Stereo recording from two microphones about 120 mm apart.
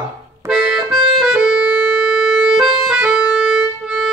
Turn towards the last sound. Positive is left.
turn(degrees=-5)  # may be behind; listen again after turning